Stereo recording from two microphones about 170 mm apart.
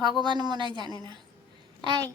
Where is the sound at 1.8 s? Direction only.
25° right (ahead or behind).